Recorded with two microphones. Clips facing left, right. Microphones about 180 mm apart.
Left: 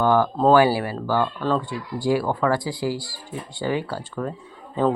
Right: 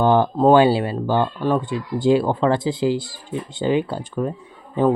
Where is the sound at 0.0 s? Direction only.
25° right (ahead or behind).